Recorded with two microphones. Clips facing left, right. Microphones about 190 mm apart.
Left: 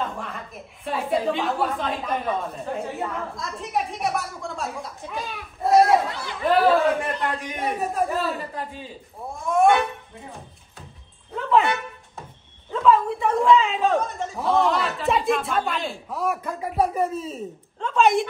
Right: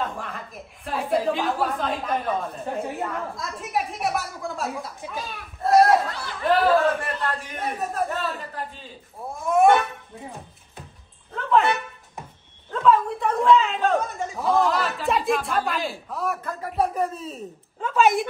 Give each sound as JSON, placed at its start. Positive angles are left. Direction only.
{"t": 0.0, "sound": "chuckle", "side_deg": 0}
{"t": 0.8, "sound": "a woman's voice", "side_deg": 0}
{"t": 5.7, "sound": "a sound", "side_deg": 0}
{"t": 7.0, "sound": "a man's voice", "side_deg": 15}
{"t": 8.1, "sound": "a sound", "side_deg": 0}
{"t": 9.5, "sound": "speech", "side_deg": -5}
{"t": 11.3, "sound": "dog", "side_deg": 0}
{"t": 12.7, "sound": "a woman's voice", "side_deg": 0}